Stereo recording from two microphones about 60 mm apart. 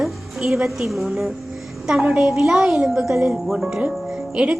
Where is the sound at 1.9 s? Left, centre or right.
Centre.